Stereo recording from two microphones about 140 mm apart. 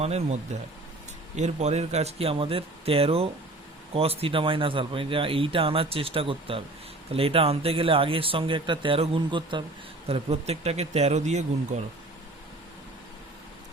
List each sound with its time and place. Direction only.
0.0 s speech: 50° right (ahead or behind)
1.4 s speech: 55° right (ahead or behind); by 9.6 s 35° right (ahead or behind)
10.1 s speech: 50° right (ahead or behind)